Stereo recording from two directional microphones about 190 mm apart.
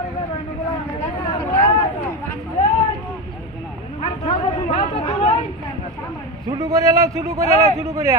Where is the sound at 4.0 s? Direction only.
30° left (ahead or behind).